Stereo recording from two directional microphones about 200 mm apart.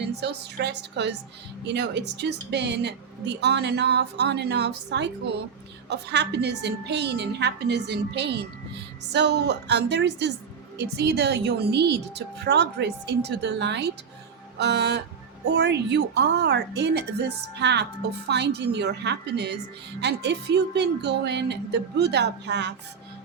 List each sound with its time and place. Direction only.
0.0 s a woman's voice: 55° right (ahead or behind)